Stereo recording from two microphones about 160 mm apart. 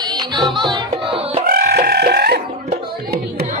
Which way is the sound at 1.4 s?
70° right (ahead or behind).